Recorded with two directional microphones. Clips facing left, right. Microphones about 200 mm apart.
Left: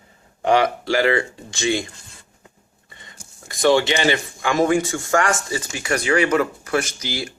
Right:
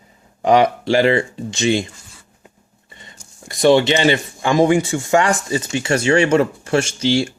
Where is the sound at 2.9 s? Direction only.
20° right (ahead or behind).